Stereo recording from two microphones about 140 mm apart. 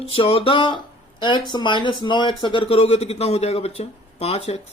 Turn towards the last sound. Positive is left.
turn(degrees=50)  # may be behind; listen again after turning